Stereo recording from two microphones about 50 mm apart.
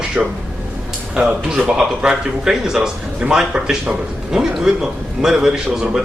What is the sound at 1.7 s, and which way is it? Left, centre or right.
Speech, centre.